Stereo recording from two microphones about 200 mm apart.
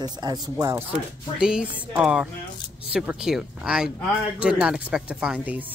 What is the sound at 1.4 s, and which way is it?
Speech, 5° right (ahead or behind).